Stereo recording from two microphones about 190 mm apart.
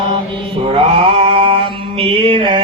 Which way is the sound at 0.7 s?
30° right (ahead or behind).